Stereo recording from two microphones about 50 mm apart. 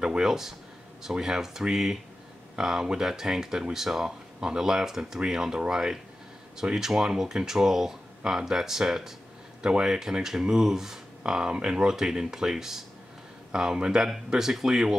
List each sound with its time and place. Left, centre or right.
0.0 s speech: centre